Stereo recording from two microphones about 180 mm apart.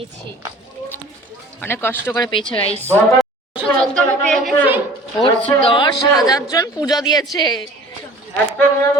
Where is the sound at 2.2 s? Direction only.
25° left (ahead or behind).